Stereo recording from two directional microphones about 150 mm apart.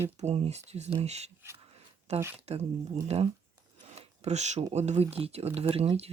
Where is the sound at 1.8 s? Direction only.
45° right (ahead or behind).